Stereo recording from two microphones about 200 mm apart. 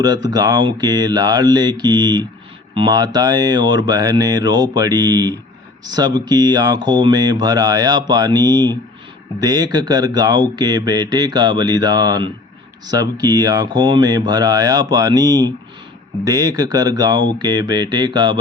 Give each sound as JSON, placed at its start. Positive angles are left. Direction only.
{"t": 0.0, "sound": "speech", "side_deg": -20}